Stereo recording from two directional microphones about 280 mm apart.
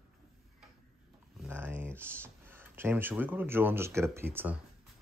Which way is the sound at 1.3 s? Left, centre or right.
Centre.